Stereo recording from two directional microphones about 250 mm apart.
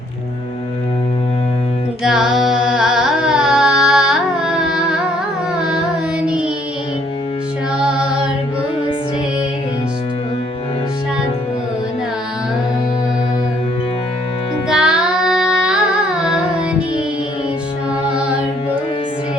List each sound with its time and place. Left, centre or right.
2.0 s carnatic music: centre
6.2 s music: centre
7.8 s child singing: centre
14.7 s music: centre
18.1 s music: centre